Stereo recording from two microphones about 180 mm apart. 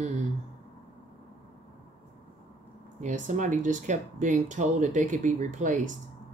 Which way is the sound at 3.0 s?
45° right (ahead or behind).